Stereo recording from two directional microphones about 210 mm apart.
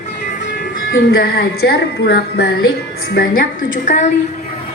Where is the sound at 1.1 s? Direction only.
45° left (ahead or behind).